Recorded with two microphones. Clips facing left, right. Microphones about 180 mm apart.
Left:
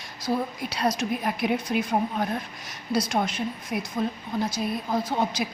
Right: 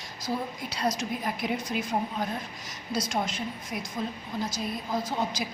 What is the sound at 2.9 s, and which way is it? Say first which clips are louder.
A woman's voice: left 5 dB; 60° left (ahead or behind).